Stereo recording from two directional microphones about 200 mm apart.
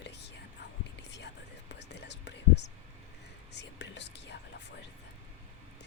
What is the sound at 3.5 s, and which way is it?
Speech, 60° left (ahead or behind).